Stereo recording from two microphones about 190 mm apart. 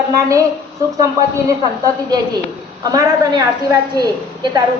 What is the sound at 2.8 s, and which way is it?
Speech, 20° right (ahead or behind).